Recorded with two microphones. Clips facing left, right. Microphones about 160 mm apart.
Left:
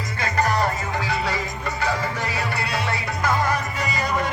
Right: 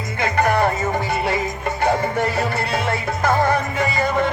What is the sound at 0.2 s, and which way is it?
Music, 55° right (ahead or behind).